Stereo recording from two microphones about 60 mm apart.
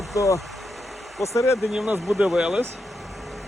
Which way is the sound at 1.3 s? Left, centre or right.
Left.